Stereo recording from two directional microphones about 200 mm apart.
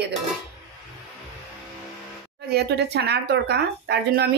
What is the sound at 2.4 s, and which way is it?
Speech, 55° right (ahead or behind).